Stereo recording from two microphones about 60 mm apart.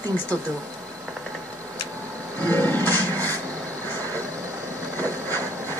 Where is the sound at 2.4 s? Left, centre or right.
Left.